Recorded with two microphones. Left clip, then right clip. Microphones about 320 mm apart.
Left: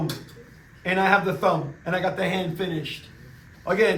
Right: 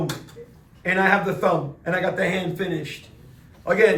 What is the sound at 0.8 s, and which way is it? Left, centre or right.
A man's voice, centre.